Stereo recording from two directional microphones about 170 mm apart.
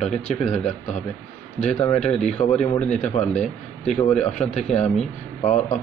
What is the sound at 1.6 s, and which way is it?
A man's voice, 40° left (ahead or behind).